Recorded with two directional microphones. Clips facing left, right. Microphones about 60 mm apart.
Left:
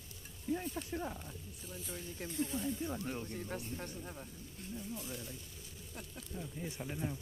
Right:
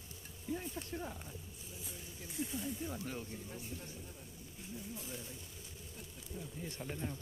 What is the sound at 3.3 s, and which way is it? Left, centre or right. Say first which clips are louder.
Speech: left 5 dB; left.